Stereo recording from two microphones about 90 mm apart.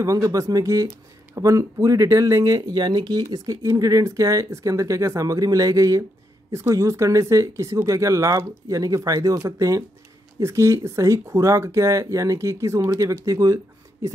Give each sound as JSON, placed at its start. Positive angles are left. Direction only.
{"t": 0.0, "sound": "speech", "side_deg": -40}